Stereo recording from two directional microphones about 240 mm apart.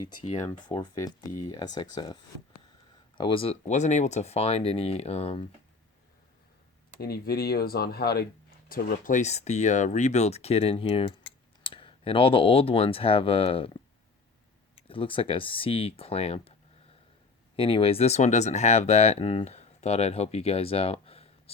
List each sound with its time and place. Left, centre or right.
0.3 s speech: left
7.0 s speech: left
14.8 s speech: left
17.6 s speech: left